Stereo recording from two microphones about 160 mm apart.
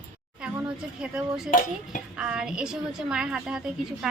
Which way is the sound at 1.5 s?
55° left (ahead or behind).